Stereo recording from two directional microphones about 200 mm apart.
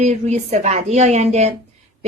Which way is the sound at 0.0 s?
35° right (ahead or behind).